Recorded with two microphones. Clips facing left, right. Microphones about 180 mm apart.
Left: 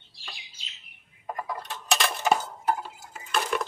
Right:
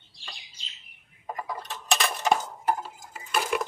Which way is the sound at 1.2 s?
5° right (ahead or behind).